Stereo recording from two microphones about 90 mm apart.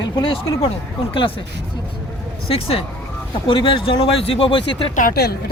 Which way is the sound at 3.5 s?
70° left (ahead or behind).